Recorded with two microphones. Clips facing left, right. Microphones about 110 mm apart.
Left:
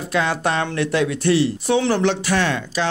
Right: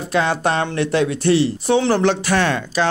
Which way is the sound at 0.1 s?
30° right (ahead or behind).